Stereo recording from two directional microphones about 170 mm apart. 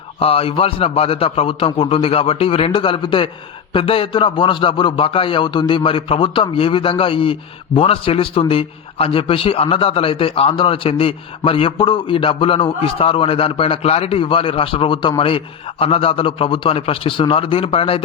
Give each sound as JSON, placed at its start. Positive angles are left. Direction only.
{"t": 0.2, "sound": "a man's voice", "side_deg": 35}